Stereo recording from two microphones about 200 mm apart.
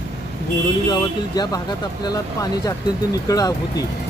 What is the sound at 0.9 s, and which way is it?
Speech, 20° left (ahead or behind).